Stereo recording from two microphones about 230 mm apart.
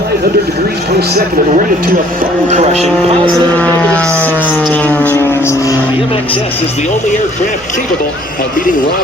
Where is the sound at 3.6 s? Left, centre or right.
Centre; by 6.9 s left.